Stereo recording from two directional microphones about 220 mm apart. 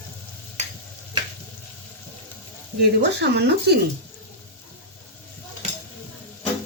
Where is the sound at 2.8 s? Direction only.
50° right (ahead or behind).